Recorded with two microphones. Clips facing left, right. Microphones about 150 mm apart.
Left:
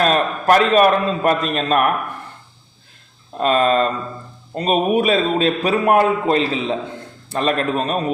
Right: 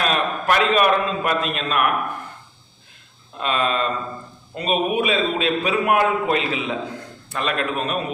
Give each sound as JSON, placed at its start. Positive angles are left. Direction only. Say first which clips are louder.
{"t": 0.0, "sound": "a man's voice", "louder": "left 5 dB", "side_deg": 40}
{"t": 3.3, "sound": "a man's voice", "louder": "left 7 dB", "side_deg": 40}